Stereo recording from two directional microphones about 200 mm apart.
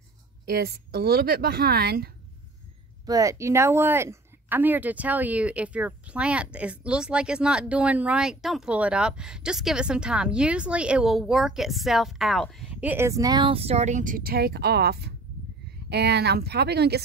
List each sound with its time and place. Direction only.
0.5 s speech: 50° right (ahead or behind)
3.1 s speech: 15° right (ahead or behind); by 17.0 s 55° right (ahead or behind)